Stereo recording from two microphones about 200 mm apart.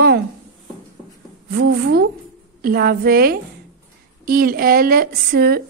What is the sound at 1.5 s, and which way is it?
A woman's voice, 50° right (ahead or behind).